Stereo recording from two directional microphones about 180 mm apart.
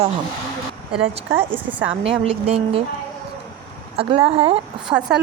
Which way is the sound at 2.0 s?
35° right (ahead or behind).